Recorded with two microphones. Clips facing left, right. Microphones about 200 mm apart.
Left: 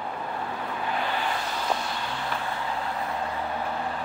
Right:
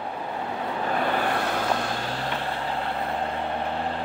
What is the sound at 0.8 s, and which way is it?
Vehicle, 50° right (ahead or behind).